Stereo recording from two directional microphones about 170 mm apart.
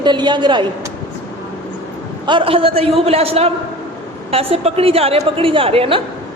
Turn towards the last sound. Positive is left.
turn(degrees=-35)  # may be behind; listen again after turning